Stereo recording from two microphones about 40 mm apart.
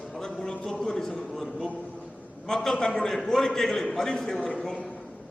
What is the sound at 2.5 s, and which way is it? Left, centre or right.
A man's voice, centre.